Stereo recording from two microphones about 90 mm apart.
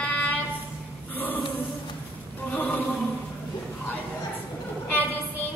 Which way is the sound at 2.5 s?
15° left (ahead or behind).